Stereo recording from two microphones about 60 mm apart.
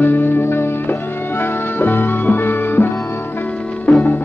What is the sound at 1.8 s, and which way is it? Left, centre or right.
Music, left.